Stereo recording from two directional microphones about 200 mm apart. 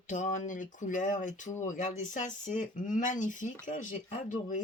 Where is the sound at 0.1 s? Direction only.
40° left (ahead or behind).